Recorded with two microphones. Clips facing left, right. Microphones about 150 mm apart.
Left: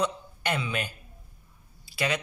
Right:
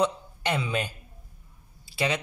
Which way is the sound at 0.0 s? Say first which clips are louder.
Right 3 dB; 30° right (ahead or behind).